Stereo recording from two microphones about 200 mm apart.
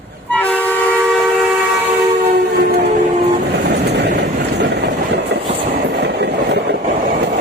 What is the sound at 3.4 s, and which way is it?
Train, 55° right (ahead or behind).